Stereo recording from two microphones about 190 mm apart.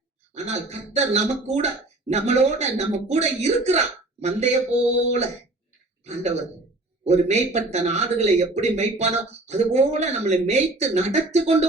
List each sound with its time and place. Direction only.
0.3 s speech: 35° right (ahead or behind)